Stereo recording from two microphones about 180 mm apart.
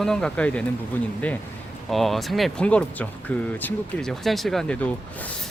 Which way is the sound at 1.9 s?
Centre (ahead or behind).